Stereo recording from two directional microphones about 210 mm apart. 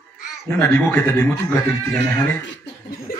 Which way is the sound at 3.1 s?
45° left (ahead or behind).